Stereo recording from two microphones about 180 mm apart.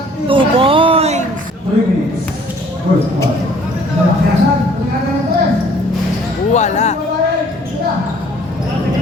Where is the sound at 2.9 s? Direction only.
65° right (ahead or behind).